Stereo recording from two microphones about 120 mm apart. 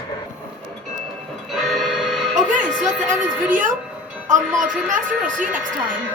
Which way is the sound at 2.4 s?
90° right.